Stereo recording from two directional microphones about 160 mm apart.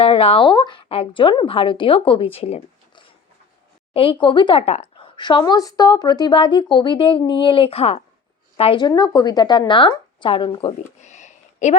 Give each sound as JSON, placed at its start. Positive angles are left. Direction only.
{"t": 0.0, "sound": "a woman's voice", "side_deg": 35}
{"t": 3.9, "sound": "a woman's voice", "side_deg": 35}
{"t": 4.6, "sound": "a woman's voice", "side_deg": 40}
{"t": 11.0, "sound": "a sound", "side_deg": 45}